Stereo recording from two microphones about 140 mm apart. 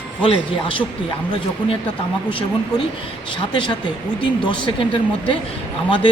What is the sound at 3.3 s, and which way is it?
Speech, 35° left (ahead or behind).